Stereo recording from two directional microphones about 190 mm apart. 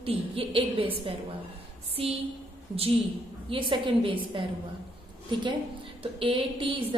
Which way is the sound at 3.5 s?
25° right (ahead or behind).